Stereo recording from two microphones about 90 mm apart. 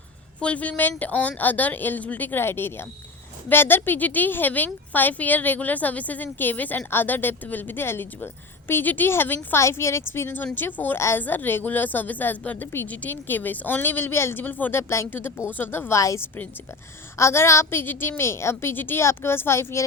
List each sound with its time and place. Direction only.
0.3 s a woman's voice: 15° left (ahead or behind); by 19.8 s 30° left (ahead or behind)